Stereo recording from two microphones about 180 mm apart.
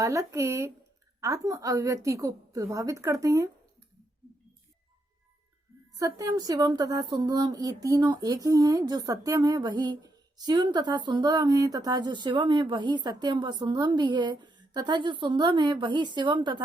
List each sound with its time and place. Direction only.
0.0 s a woman's voice: 15° right (ahead or behind)
6.0 s speech: 20° right (ahead or behind)